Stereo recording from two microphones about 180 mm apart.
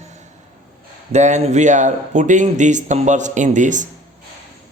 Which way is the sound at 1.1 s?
40° right (ahead or behind).